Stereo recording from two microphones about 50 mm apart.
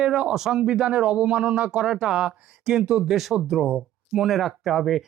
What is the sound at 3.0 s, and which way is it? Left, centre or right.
Speech, centre.